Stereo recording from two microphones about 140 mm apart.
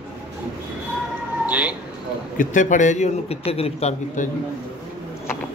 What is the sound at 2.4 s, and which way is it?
A man's voice, 65° left (ahead or behind).